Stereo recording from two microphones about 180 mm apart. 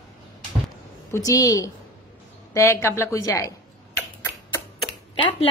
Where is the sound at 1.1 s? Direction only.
20° left (ahead or behind).